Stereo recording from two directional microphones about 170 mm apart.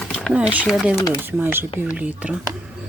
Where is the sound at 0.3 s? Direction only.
10° right (ahead or behind).